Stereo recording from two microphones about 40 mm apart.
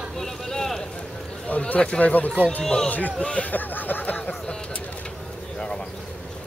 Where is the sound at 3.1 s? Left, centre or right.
Left.